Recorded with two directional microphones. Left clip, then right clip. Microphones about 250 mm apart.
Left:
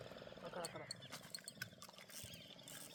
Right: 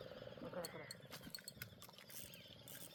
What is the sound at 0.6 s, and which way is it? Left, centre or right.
Wild animals, left.